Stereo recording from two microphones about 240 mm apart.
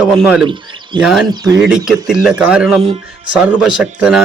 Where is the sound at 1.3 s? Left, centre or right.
Centre.